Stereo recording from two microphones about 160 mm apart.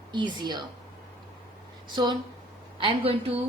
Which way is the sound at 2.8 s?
35° right (ahead or behind).